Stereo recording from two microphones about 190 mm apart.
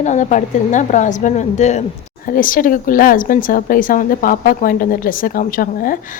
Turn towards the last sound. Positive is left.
turn(degrees=50)  # may be behind; listen again after turning